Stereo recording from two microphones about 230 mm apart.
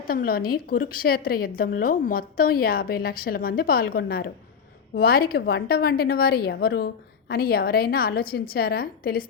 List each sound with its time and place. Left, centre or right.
0.1 s a woman's voice: left